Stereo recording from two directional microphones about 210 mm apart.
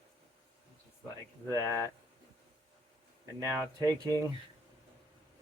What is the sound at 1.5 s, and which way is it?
Speech, 15° right (ahead or behind).